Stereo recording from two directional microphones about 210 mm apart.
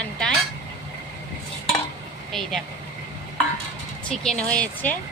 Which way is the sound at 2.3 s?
Centre (ahead or behind).